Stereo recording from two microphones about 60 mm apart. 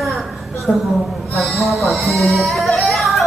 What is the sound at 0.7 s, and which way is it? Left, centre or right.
Speech, left.